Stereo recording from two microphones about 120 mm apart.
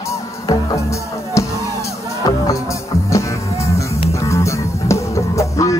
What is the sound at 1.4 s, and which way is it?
Music, 25° left (ahead or behind).